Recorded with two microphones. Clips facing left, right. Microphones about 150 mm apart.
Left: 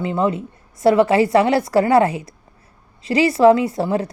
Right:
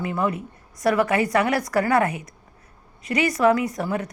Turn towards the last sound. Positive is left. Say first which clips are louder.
# left 6 dB
turn(degrees=30)  # may be behind; listen again after turning